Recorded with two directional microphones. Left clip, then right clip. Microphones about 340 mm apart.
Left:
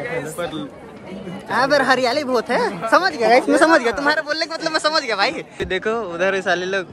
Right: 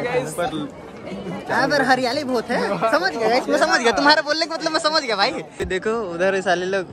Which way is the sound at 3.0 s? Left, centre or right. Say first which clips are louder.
Left 9 dB; centre.